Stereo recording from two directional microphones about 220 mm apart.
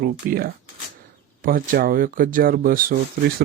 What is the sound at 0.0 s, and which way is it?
Speech, 45° right (ahead or behind).